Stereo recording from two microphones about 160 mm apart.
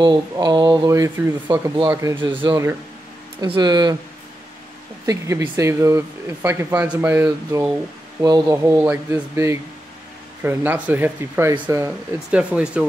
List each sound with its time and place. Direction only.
0.0 s speech: 30° right (ahead or behind)
5.0 s speech: 20° right (ahead or behind)
8.2 s speech: 25° right (ahead or behind); by 12.6 s 5° right (ahead or behind)